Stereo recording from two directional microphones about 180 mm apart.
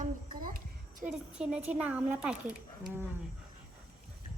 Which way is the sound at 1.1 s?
5° right (ahead or behind).